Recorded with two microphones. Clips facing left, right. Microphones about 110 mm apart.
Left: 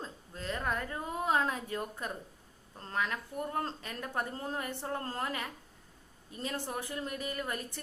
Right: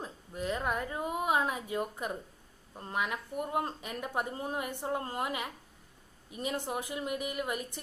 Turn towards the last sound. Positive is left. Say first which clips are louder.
# right 2 dB
turn(degrees=-15)  # may be behind; listen again after turning